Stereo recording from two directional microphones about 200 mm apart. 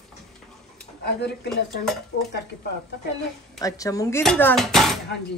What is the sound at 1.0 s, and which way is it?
Speech, 55° left (ahead or behind).